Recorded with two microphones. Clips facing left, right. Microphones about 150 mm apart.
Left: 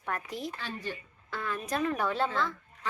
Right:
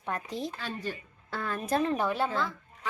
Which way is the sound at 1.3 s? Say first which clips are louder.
Right 3 dB; 35° right (ahead or behind).